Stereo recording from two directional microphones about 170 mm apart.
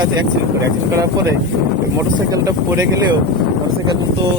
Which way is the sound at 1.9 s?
20° right (ahead or behind).